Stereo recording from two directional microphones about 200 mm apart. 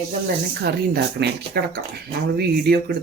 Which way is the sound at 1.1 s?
55° right (ahead or behind).